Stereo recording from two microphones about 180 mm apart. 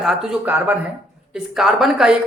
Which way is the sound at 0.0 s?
Centre (ahead or behind).